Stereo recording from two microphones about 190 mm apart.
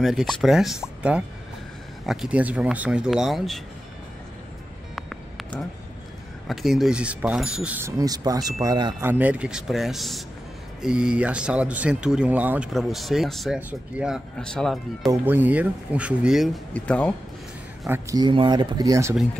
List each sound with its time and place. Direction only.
0.0 s speech: centre (ahead or behind)
4.9 s music: centre (ahead or behind)
6.4 s speech: centre (ahead or behind); by 8.9 s 20° right (ahead or behind)
9.0 s speech: 10° right (ahead or behind)
15.2 s speech: 10° right (ahead or behind)
16.7 s speech: 5° left (ahead or behind)
17.8 s speech: 15° right (ahead or behind)